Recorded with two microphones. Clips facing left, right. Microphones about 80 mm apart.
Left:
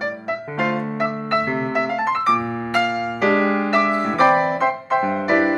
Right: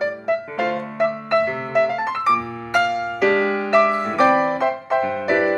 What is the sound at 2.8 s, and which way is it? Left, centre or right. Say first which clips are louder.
Music: right 1 dB; centre.